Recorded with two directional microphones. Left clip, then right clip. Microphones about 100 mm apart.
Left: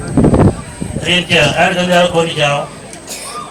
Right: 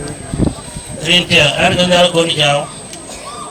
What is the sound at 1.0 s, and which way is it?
A man's voice, 15° right (ahead or behind).